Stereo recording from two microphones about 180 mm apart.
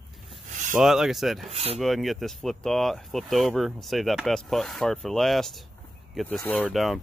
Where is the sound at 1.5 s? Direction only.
35° right (ahead or behind).